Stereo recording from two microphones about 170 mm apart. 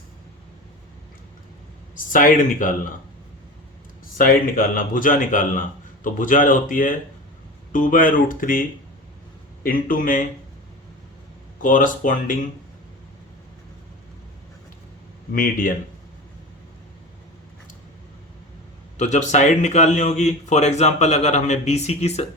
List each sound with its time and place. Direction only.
2.0 s speech: 55° left (ahead or behind)
4.2 s speech: 55° left (ahead or behind)
9.6 s speech: 55° left (ahead or behind)
11.6 s speech: 50° left (ahead or behind)
15.3 s speech: 55° left (ahead or behind)
18.9 s speech: 45° left (ahead or behind)